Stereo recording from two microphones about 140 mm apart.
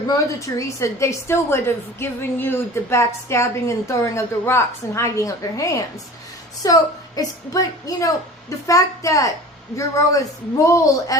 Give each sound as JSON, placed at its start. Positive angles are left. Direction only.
{"t": 0.1, "sound": "a woman's voice", "side_deg": 25}